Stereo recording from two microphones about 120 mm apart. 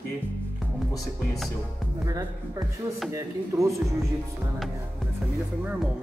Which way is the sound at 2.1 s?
30° right (ahead or behind).